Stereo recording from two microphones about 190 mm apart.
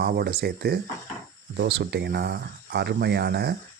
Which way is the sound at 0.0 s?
55° right (ahead or behind).